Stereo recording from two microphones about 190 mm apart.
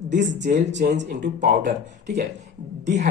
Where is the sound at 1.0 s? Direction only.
45° right (ahead or behind).